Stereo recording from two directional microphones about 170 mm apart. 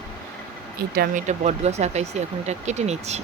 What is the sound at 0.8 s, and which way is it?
Speech, 60° right (ahead or behind).